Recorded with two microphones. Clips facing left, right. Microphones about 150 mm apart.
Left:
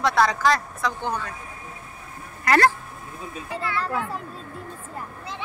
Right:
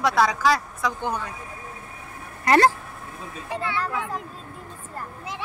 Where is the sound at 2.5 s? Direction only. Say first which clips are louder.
Right 1 dB; 20° right (ahead or behind).